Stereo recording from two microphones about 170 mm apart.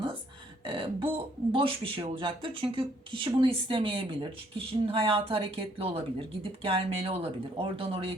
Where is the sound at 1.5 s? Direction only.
30° right (ahead or behind).